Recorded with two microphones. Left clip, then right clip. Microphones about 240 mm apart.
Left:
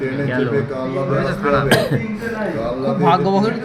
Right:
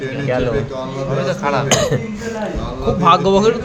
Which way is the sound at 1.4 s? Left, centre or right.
Right.